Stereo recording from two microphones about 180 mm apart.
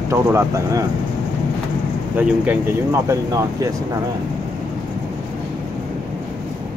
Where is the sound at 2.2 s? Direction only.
10° right (ahead or behind).